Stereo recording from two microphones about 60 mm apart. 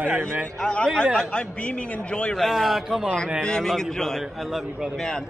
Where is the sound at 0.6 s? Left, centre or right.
Centre.